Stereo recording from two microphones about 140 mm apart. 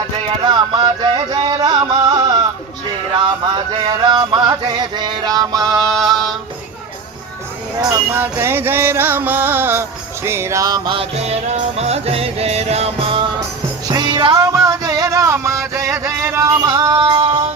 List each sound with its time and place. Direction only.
0.4 s music: 30° right (ahead or behind)
3.2 s a sound: 35° right (ahead or behind)
7.8 s music: 25° right (ahead or behind)
8.2 s music: 15° right (ahead or behind)
10.9 s music: 50° right (ahead or behind); by 14.3 s 35° right (ahead or behind)
14.3 s music: 20° right (ahead or behind); by 17.4 s 40° right (ahead or behind)